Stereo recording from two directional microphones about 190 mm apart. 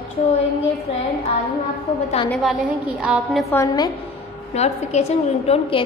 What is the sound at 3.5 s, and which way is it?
Speech, 20° left (ahead or behind).